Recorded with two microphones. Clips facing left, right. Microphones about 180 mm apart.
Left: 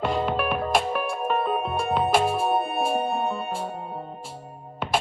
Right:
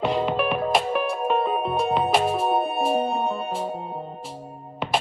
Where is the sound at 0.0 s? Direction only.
Centre (ahead or behind).